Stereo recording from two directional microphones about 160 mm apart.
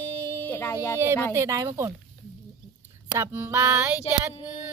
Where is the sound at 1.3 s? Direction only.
20° right (ahead or behind).